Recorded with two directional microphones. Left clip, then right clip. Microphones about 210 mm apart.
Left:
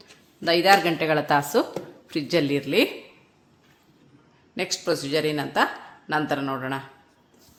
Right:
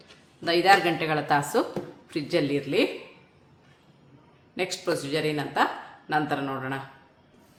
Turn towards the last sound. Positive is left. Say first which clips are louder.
# left 2 dB
turn(degrees=35)  # may be behind; listen again after turning